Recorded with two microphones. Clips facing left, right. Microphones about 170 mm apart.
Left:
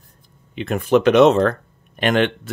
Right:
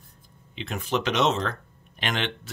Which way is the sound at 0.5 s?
55° left (ahead or behind).